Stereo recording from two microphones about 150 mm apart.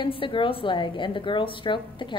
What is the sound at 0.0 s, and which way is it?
A woman's voice, 35° left (ahead or behind).